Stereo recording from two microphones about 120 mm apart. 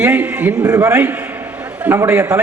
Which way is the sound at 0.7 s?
20° right (ahead or behind).